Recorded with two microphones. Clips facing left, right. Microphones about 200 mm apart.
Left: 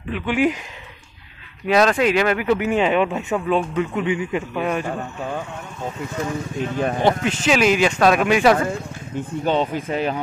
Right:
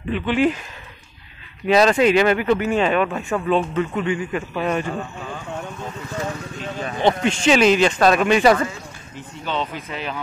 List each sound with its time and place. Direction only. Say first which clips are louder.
0.1 s a man's voice: right 1 dB; 10° left (ahead or behind)
1.7 s a man's voice: right 2 dB; centre (ahead or behind)
6.8 s speech: left 3 dB; 50° left (ahead or behind)
7.1 s speech: right 4 dB; 5° left (ahead or behind)
9.4 s speech: left 5 dB; 45° left (ahead or behind)